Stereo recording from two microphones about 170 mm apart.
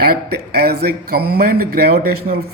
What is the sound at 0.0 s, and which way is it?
Speech, 65° right (ahead or behind).